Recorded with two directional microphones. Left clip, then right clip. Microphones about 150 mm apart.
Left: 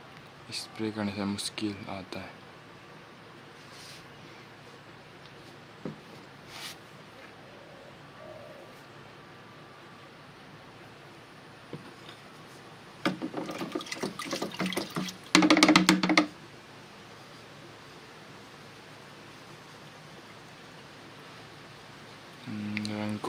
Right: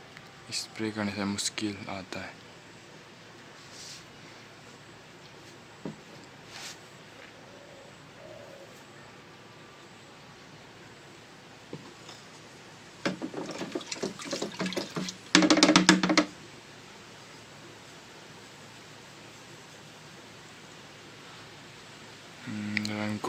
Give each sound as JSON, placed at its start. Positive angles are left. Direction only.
{"t": 0.5, "sound": "speech", "side_deg": 0}
{"t": 13.0, "sound": "water", "side_deg": 20}
{"t": 22.7, "sound": "a sound", "side_deg": 0}